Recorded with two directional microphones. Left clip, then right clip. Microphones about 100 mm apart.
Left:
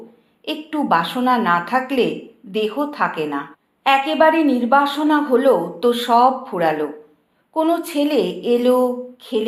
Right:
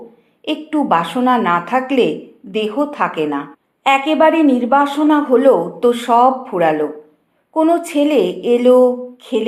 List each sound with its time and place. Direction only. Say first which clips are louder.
0.4 s speech: right 4 dB; 35° right (ahead or behind)